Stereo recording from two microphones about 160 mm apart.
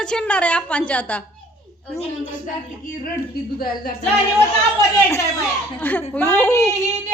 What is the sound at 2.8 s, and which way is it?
Speech, 65° left (ahead or behind).